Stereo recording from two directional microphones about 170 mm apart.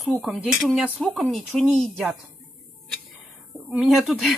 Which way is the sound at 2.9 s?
Centre (ahead or behind).